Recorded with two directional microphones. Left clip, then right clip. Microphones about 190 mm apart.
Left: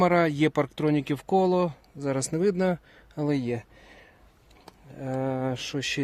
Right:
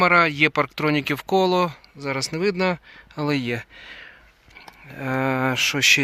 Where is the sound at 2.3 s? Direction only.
15° left (ahead or behind).